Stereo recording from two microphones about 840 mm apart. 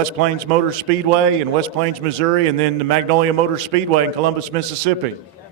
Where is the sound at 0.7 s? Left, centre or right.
Right.